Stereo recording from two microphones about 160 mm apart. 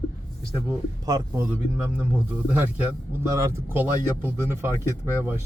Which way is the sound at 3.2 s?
15° right (ahead or behind).